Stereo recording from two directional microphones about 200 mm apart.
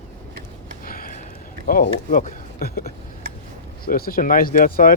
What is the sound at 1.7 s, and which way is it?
Speech, 45° left (ahead or behind).